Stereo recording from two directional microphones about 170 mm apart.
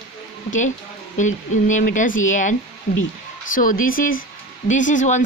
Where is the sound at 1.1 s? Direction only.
45° left (ahead or behind).